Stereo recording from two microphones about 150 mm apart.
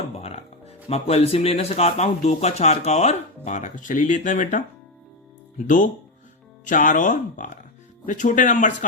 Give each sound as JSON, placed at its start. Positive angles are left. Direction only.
{"t": 0.9, "sound": "speech", "side_deg": 45}